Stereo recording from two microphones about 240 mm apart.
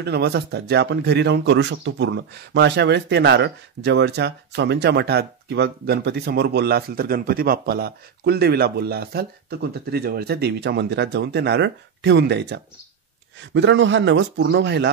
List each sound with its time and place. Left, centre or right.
0.0 s a man's voice: right